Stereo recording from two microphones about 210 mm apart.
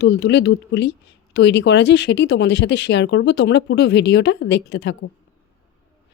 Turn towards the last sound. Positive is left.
turn(degrees=55)  # may be behind; listen again after turning